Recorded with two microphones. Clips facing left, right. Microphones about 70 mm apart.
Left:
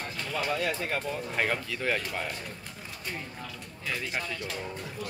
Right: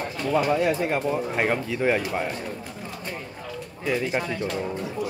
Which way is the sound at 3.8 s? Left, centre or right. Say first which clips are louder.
Right 9 dB; centre.